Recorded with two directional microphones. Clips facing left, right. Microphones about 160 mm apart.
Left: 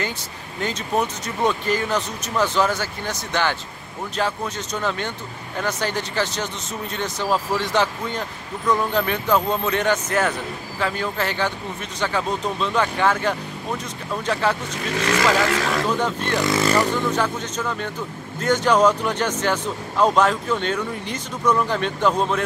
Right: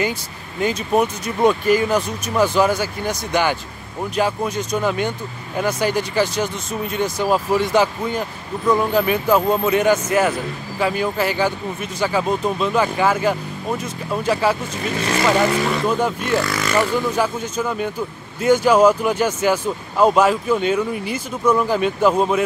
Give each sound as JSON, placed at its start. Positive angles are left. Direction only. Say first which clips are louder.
{"t": 0.6, "sound": "speech", "louder": "right 5 dB", "side_deg": -10}
{"t": 15.3, "sound": "speech", "louder": "right 3 dB", "side_deg": 90}
{"t": 15.7, "sound": "speech", "louder": "right 2 dB", "side_deg": -10}
{"t": 16.3, "sound": "speech", "louder": "left 5 dB", "side_deg": 25}
{"t": 16.7, "sound": "speech", "louder": "right 2 dB", "side_deg": -10}